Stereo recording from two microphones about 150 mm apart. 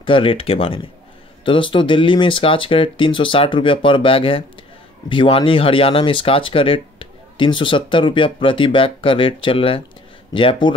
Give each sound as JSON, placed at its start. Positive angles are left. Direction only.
{"t": 0.0, "sound": "speech", "side_deg": 35}